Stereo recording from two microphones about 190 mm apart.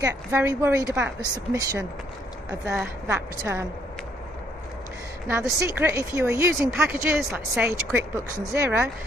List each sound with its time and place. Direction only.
0.0 s a woman's voice: 15° right (ahead or behind)
5.3 s a woman's voice: 15° right (ahead or behind)
7.2 s a woman's voice: centre (ahead or behind)